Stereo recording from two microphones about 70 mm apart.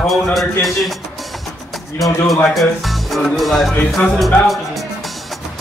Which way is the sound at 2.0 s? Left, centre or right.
Left.